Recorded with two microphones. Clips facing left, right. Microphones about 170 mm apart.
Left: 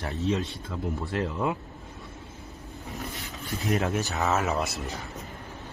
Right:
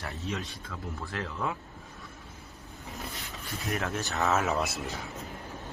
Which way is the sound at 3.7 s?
20° left (ahead or behind).